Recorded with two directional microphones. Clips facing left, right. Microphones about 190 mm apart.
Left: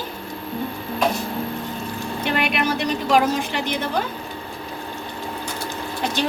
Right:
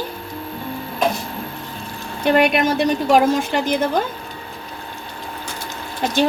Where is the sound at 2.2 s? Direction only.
45° right (ahead or behind).